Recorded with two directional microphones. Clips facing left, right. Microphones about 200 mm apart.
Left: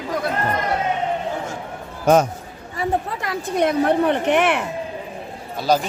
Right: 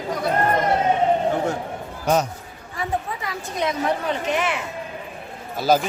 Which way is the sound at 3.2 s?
60° left (ahead or behind).